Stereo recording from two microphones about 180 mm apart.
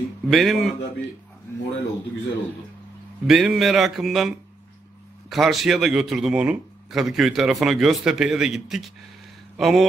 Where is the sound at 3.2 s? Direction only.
Centre (ahead or behind).